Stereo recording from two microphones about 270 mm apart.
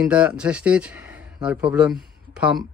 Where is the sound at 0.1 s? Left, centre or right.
Centre.